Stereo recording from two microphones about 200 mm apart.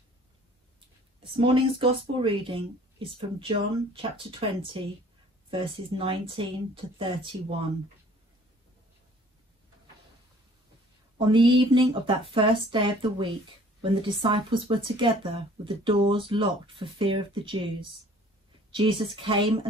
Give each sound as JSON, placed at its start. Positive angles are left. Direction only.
{"t": 1.3, "sound": "speech", "side_deg": -25}
{"t": 11.1, "sound": "speech", "side_deg": -20}